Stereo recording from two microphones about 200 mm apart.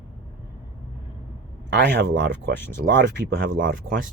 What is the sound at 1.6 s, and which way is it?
Speech, 60° right (ahead or behind).